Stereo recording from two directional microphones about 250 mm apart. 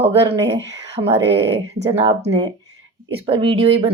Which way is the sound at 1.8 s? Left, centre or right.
Centre.